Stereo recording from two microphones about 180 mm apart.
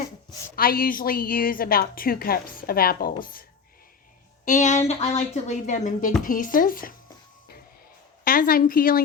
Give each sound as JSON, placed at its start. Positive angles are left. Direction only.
{"t": 0.5, "sound": "a woman's voice", "side_deg": 55}
{"t": 4.4, "sound": "a woman's voice", "side_deg": 45}
{"t": 8.2, "sound": "a woman's voice", "side_deg": 50}